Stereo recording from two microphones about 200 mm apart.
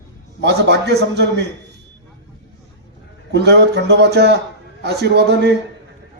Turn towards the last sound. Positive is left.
turn(degrees=-55)  # may be behind; listen again after turning